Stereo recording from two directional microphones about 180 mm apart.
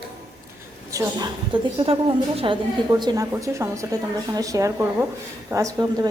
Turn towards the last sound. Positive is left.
turn(degrees=-20)  # may be behind; listen again after turning